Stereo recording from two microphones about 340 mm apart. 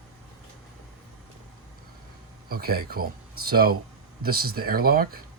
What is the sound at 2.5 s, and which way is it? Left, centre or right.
Speech, right.